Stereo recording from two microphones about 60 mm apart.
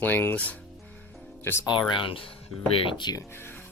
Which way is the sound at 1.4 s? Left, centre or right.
Left.